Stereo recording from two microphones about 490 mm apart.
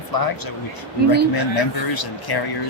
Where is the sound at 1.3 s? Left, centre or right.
Left.